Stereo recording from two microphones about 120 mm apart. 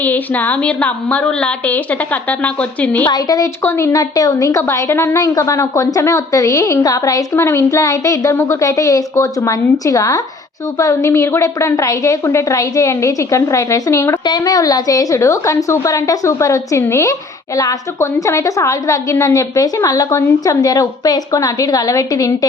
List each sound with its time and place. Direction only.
0.0 s a woman's voice: 15° left (ahead or behind)
3.1 s a woman's voice: 30° left (ahead or behind)